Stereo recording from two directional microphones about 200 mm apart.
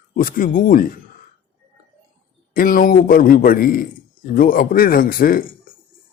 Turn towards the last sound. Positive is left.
turn(degrees=45)  # may be behind; listen again after turning